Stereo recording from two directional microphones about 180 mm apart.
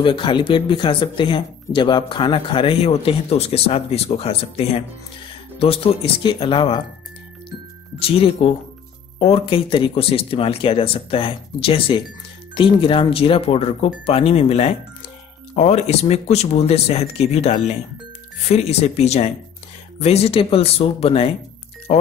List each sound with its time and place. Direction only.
0.0 s speech: 25° left (ahead or behind)
8.0 s speech: 30° left (ahead or behind)